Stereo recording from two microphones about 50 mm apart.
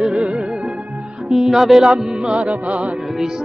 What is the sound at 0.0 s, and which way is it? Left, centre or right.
Music, right.